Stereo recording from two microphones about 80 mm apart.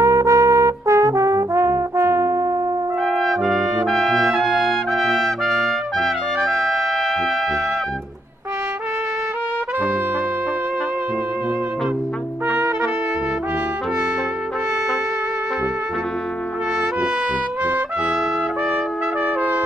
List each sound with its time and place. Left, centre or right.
0.0 s brass instrument: right
3.0 s brass instrument: centre
12.4 s trumpet: right
17.6 s trumpet: right